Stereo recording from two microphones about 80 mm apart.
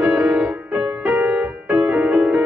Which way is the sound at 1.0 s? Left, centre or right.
Centre.